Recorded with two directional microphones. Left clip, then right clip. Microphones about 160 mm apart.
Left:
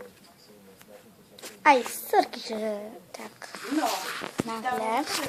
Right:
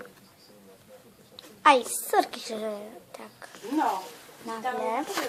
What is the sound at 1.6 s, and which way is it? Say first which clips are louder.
A woman's voice: even; centre (ahead or behind).